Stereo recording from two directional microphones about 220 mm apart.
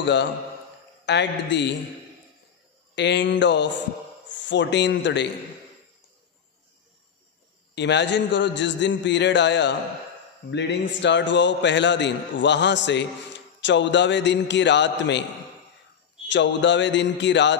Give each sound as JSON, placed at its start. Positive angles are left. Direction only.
{"t": 0.0, "sound": "a man's voice", "side_deg": 50}
{"t": 3.0, "sound": "a man's voice", "side_deg": 55}
{"t": 7.7, "sound": "a man's voice", "side_deg": 50}
{"t": 16.3, "sound": "a man's voice", "side_deg": 55}